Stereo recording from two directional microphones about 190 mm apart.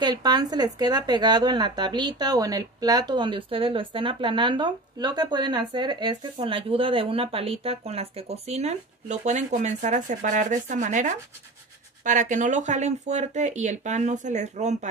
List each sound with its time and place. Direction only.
0.0 s speech: 20° right (ahead or behind); by 14.9 s 35° right (ahead or behind)